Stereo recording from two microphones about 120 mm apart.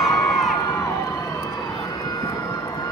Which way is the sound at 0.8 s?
30° left (ahead or behind).